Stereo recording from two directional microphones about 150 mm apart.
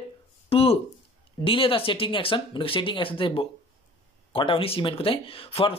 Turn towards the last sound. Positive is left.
turn(degrees=40)  # may be behind; listen again after turning